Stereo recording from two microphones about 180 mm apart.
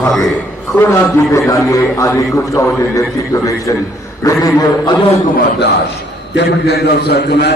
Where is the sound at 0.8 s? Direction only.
15° left (ahead or behind).